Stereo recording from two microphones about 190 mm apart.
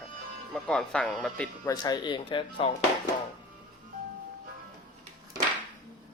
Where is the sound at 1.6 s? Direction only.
20° left (ahead or behind).